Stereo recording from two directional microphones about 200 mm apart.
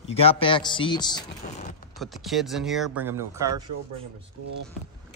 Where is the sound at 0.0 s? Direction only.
30° left (ahead or behind).